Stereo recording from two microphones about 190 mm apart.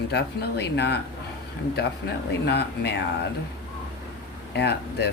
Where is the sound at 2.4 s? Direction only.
60° left (ahead or behind).